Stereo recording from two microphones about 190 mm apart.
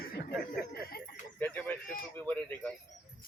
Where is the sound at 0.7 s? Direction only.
55° left (ahead or behind).